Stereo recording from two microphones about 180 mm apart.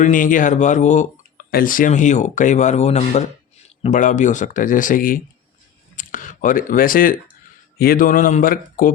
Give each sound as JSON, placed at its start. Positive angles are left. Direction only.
{"t": 0.0, "sound": "speech", "side_deg": 45}